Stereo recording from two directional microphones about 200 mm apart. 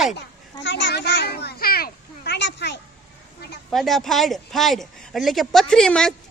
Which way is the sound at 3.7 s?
Centre (ahead or behind).